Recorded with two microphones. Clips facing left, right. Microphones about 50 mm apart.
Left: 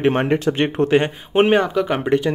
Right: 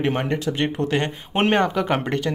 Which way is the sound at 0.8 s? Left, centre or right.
Left.